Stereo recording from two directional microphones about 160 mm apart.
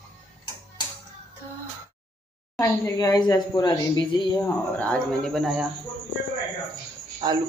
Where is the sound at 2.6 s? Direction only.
20° left (ahead or behind).